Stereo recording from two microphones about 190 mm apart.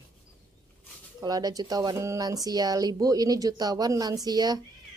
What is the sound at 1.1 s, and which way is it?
A woman's voice, 20° right (ahead or behind).